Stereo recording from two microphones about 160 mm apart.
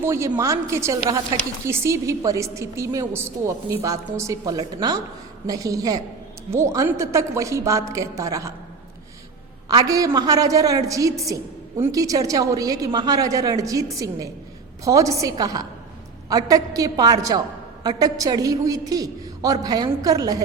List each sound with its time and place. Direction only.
0.0 s a woman's voice: 15° right (ahead or behind)
9.6 s a woman's voice: 25° right (ahead or behind)